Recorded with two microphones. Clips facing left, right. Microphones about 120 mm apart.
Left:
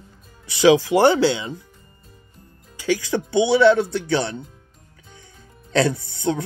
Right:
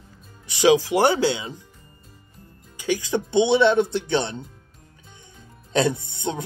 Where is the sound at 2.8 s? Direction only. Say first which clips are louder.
Left 2 dB; 20° right (ahead or behind).